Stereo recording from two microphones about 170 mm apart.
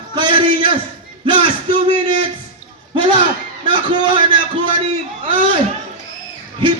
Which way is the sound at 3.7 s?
30° right (ahead or behind).